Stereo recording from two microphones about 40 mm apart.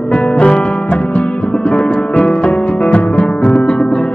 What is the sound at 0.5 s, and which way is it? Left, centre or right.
Music, left.